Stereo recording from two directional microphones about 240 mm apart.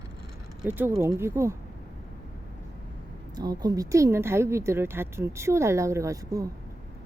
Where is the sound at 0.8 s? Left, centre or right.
Centre.